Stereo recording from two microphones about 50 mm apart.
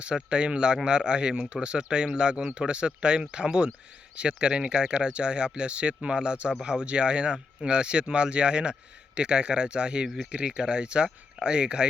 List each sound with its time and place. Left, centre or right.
0.0 s speech: centre